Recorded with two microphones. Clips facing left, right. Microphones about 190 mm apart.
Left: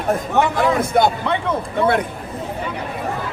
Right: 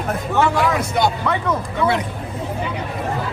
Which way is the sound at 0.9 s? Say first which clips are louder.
Left 3 dB; 50° left (ahead or behind).